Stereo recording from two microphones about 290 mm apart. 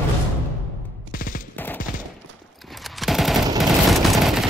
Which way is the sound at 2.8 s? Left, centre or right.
Centre.